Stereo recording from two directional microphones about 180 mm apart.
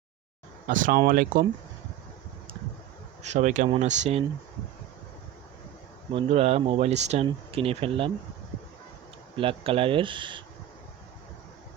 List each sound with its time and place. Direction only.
0.7 s speech: 50° right (ahead or behind)
3.2 s speech: 40° right (ahead or behind)
6.1 s speech: 35° right (ahead or behind)
9.4 s speech: 30° right (ahead or behind)